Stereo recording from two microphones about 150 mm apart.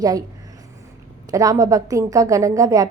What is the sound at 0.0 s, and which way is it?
Speech, 25° right (ahead or behind).